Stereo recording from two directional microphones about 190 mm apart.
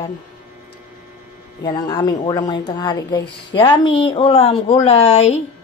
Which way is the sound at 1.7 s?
20° left (ahead or behind).